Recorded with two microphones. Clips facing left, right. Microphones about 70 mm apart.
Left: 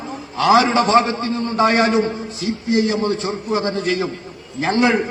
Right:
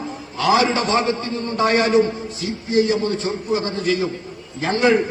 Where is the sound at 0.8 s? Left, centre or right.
Left.